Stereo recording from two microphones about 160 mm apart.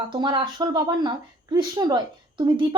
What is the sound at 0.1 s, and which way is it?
Speech, 30° right (ahead or behind).